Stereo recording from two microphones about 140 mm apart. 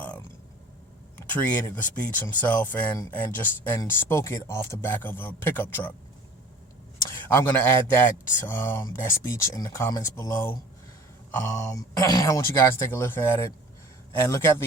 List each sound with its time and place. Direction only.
0.0 s burping: 10° left (ahead or behind)
1.2 s speech: 15° left (ahead or behind)
7.1 s speech: 15° left (ahead or behind)